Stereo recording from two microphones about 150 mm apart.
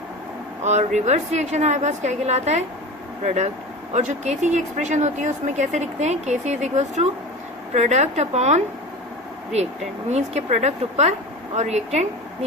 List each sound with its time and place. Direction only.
0.6 s speech: 50° right (ahead or behind)